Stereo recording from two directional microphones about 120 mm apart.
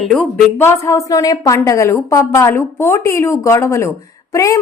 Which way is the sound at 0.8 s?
25° left (ahead or behind).